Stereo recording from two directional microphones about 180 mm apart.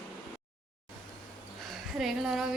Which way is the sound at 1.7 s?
Centre (ahead or behind).